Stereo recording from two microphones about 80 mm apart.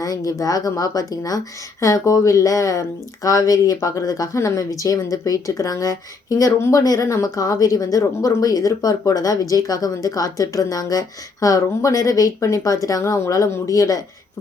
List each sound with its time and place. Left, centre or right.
0.0 s speech: left
4.4 s speech: left